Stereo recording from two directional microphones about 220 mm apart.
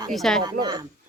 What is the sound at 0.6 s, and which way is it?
Speech, 20° right (ahead or behind).